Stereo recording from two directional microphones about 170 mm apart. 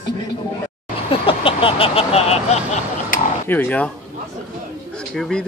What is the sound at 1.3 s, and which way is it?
Speech, 30° left (ahead or behind).